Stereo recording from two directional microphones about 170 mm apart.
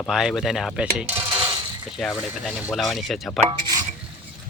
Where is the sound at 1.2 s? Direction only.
20° right (ahead or behind).